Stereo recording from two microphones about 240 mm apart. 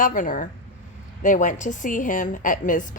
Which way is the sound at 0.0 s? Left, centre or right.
Left.